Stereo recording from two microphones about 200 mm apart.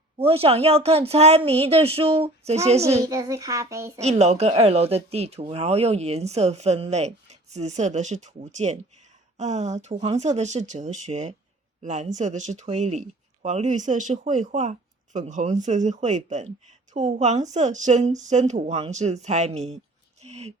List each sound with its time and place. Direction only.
0.2 s a woman's voice: 30° right (ahead or behind)
3.0 s child singing: 15° right (ahead or behind)
4.0 s speech: 35° right (ahead or behind)
20.2 s a sound: 35° right (ahead or behind)